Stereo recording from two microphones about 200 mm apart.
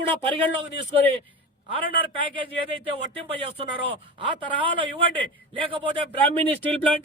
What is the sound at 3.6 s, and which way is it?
Speech, 25° right (ahead or behind).